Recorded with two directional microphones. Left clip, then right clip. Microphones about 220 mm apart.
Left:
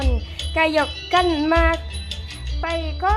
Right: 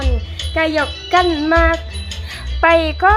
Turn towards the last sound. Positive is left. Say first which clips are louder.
# right 11 dB
turn(degrees=-10)  # may be behind; listen again after turning